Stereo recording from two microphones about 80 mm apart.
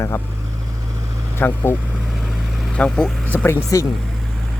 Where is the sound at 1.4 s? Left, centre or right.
Left.